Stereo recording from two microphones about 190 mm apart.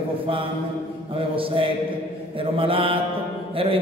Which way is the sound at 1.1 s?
30° right (ahead or behind).